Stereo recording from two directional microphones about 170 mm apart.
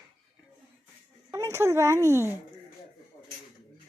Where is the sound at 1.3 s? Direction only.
15° right (ahead or behind).